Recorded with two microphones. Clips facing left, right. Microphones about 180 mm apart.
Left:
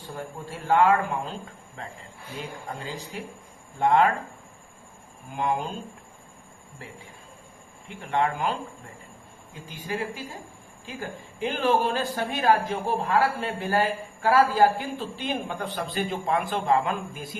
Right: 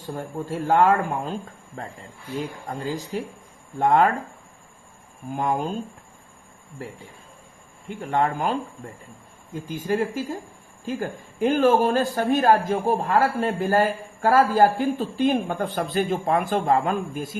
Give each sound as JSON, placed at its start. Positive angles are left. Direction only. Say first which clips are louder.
{"t": 0.0, "sound": "speech", "louder": "right 5 dB", "side_deg": -45}
{"t": 3.1, "sound": "speech", "louder": "right 7 dB", "side_deg": -40}
{"t": 5.3, "sound": "speech", "louder": "right 3 dB", "side_deg": -45}
{"t": 7.9, "sound": "speech", "louder": "right 3 dB", "side_deg": -45}